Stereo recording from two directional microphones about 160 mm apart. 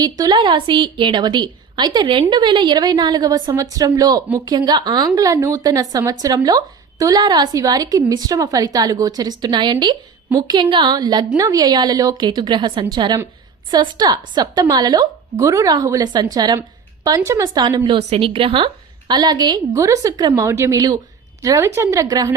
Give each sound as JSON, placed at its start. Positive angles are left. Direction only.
{"t": 0.0, "sound": "a woman's voice", "side_deg": -25}